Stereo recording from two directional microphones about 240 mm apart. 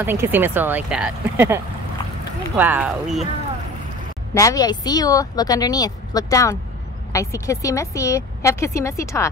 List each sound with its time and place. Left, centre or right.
0.0 s speech: centre
4.3 s a woman's voice: centre